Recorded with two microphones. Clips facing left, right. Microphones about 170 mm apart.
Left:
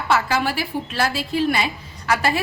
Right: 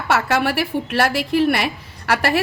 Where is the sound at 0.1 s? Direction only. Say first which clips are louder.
Right 2 dB; 70° right (ahead or behind).